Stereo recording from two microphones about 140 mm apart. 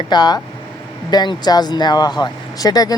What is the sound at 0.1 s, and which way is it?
Speech, 30° left (ahead or behind).